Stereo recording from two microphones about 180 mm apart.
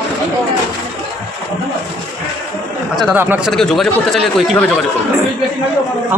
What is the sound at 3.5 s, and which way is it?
Speech, centre (ahead or behind).